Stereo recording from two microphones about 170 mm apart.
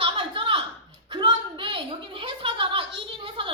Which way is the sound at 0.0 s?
30° right (ahead or behind).